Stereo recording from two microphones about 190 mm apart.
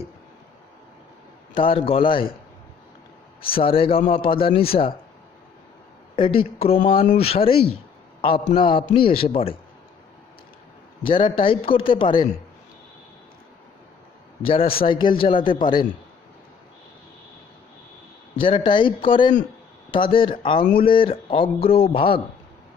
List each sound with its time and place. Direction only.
1.5 s a man's voice: 30° left (ahead or behind)
3.3 s a man's voice: 30° left (ahead or behind)
6.1 s a man's voice: 30° left (ahead or behind)
11.1 s a man's voice: 25° left (ahead or behind)
14.4 s a man's voice: 30° left (ahead or behind)
18.3 s a man's voice: 25° left (ahead or behind)